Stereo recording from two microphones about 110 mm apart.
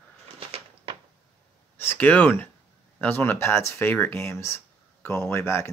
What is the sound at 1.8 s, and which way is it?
Speech, 15° left (ahead or behind).